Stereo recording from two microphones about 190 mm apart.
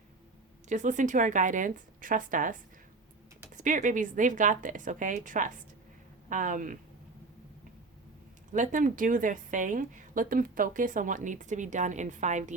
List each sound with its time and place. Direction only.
0.7 s a woman's voice: 40° right (ahead or behind)
8.5 s a woman's voice: 40° right (ahead or behind)